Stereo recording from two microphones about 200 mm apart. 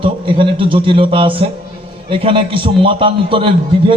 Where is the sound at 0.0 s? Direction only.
25° right (ahead or behind).